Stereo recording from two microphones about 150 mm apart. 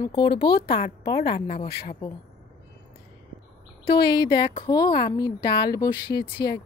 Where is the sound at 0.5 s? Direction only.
90° left.